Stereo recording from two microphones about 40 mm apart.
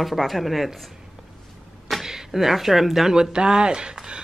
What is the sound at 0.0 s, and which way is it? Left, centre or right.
Speech, centre.